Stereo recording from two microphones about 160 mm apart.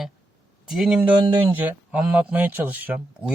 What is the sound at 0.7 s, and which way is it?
Speech, 5° right (ahead or behind).